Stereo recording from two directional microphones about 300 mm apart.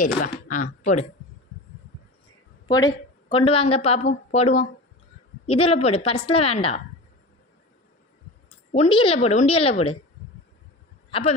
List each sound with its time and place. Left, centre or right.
0.0 s a woman's voice: left
2.7 s a woman's voice: centre
8.7 s a woman's voice: centre
11.1 s speech: centre